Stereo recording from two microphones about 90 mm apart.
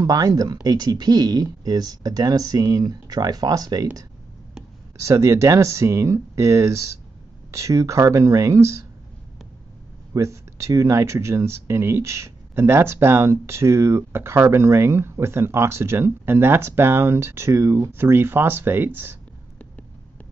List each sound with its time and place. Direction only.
0.0 s speech: 45° right (ahead or behind)
5.0 s speech: 35° right (ahead or behind)
10.1 s speech: 35° right (ahead or behind)